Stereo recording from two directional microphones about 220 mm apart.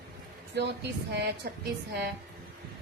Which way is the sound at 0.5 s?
50° right (ahead or behind).